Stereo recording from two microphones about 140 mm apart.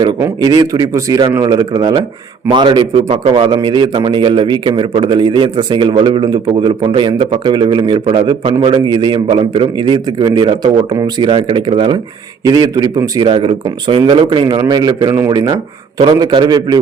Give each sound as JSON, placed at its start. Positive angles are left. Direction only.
{"t": 0.2, "sound": "a man's voice", "side_deg": -30}
{"t": 11.3, "sound": "a man's voice", "side_deg": -40}